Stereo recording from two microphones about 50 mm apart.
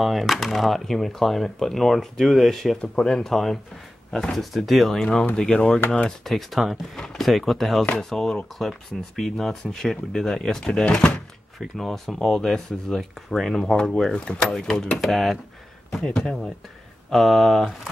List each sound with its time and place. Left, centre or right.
0.0 s speech: centre
5.3 s speech: centre
6.0 s speech: centre
7.0 s speech: centre
11.8 s speech: centre
14.1 s speech: centre